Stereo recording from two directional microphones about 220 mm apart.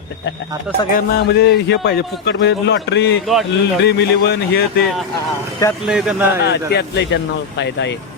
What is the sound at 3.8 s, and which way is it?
A man's voice, 50° left (ahead or behind).